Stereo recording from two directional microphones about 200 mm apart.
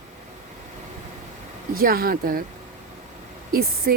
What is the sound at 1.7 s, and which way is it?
Speech, 45° right (ahead or behind).